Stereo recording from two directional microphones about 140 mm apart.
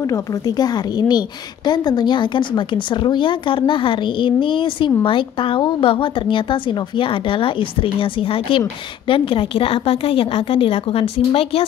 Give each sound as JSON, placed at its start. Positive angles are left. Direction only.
{"t": 0.0, "sound": "speech", "side_deg": 25}